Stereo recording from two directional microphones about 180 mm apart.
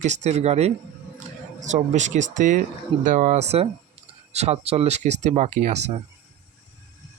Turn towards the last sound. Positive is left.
turn(degrees=-40)  # may be behind; listen again after turning